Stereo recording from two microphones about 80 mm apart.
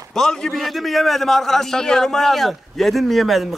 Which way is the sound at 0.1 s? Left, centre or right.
Centre.